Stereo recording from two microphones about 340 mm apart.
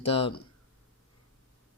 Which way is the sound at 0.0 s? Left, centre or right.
Centre.